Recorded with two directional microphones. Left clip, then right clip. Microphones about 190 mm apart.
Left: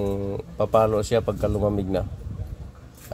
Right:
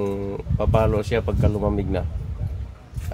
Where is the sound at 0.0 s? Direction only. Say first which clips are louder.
Right 1 dB; 15° left (ahead or behind).